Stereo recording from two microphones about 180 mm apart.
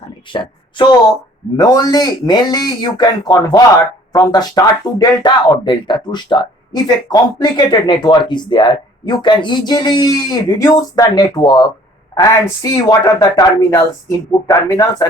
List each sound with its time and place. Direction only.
0.3 s a woman's voice: 25° left (ahead or behind)